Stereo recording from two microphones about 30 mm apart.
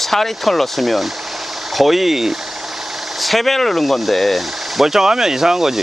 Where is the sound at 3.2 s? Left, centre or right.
Centre.